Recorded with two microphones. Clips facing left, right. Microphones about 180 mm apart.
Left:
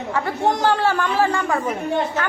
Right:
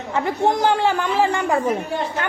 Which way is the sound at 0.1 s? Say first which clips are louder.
Right 2 dB; 15° right (ahead or behind).